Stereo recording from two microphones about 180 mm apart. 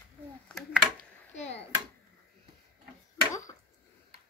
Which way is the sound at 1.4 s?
35° left (ahead or behind).